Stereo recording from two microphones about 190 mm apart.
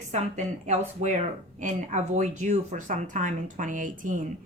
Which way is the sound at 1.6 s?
40° right (ahead or behind).